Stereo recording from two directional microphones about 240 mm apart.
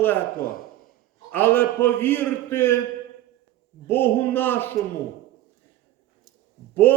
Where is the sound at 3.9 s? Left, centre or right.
Centre.